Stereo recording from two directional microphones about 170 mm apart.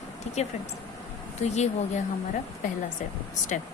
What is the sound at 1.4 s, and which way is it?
Speech, 40° left (ahead or behind).